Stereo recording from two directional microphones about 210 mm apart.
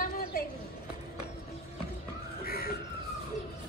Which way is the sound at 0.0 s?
45° left (ahead or behind).